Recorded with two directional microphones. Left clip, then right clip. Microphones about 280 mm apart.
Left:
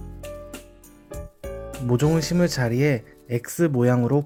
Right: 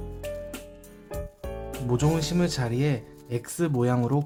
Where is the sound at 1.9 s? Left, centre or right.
Centre.